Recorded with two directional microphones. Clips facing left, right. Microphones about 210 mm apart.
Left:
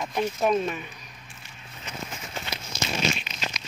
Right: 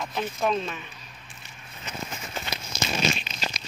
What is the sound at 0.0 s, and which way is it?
Speech, 15° left (ahead or behind).